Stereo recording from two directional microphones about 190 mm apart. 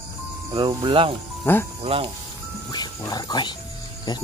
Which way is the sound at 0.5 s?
25° right (ahead or behind).